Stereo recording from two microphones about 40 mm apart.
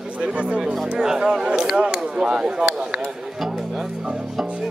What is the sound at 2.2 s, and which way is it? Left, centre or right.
Speech, right.